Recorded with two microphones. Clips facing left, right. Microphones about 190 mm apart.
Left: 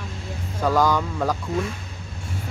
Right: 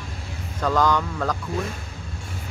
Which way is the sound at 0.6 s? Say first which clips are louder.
Left 1 dB; 10° left (ahead or behind).